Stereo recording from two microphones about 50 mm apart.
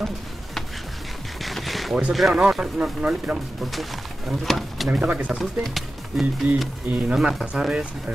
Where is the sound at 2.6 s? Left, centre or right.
Right.